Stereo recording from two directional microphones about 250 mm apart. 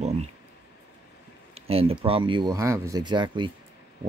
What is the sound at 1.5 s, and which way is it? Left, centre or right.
Speech, right.